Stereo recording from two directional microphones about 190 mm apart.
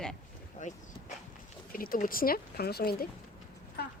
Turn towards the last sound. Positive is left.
turn(degrees=55)  # may be behind; listen again after turning